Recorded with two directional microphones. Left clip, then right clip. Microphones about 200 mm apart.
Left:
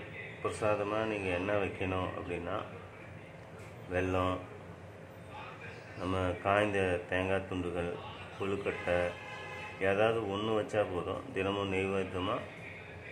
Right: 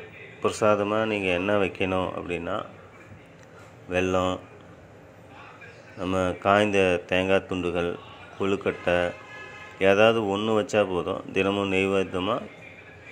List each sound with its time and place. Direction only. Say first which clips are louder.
0.4 s speech: right 10 dB; 35° right (ahead or behind)
3.9 s speech: right 9 dB; 30° right (ahead or behind)
6.0 s speech: right 9 dB; 30° right (ahead or behind)
10.3 s speech: right 8 dB; 20° right (ahead or behind)
10.6 s speech: right 9 dB; 35° right (ahead or behind)
11.4 s speech: right 7 dB; 25° right (ahead or behind)
11.7 s speech: right 9 dB; 35° right (ahead or behind)